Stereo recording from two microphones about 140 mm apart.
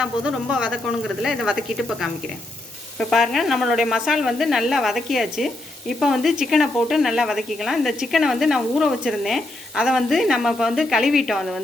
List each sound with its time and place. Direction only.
0.0 s a woman's voice: 5° right (ahead or behind)